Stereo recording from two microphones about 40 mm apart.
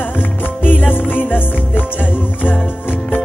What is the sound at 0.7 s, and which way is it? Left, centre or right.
Music, left.